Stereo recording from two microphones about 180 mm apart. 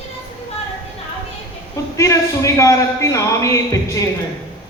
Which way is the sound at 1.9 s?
15° left (ahead or behind).